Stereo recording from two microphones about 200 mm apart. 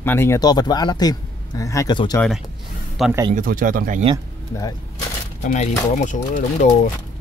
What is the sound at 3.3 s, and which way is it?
Speech, 45° right (ahead or behind).